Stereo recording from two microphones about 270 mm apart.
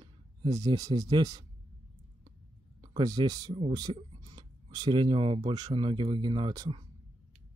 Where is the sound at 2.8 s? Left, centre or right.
Centre.